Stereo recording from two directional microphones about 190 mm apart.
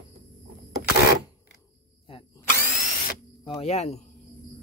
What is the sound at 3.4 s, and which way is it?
Speech, 30° left (ahead or behind).